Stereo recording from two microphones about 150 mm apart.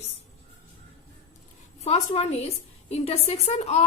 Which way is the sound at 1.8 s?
45° left (ahead or behind).